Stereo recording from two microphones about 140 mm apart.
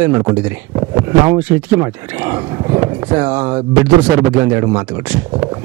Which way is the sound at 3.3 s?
15° right (ahead or behind).